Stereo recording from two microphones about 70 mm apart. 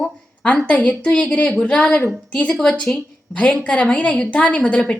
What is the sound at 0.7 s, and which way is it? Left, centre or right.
A woman's voice, centre.